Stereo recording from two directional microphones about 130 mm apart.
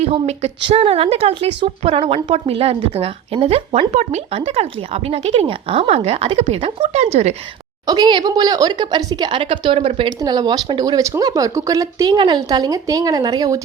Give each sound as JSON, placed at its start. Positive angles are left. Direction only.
{"t": 0.0, "sound": "a woman's voice", "side_deg": -55}
{"t": 6.9, "sound": "speech", "side_deg": -55}
{"t": 7.9, "sound": "speech", "side_deg": -35}
{"t": 10.2, "sound": "speech", "side_deg": -30}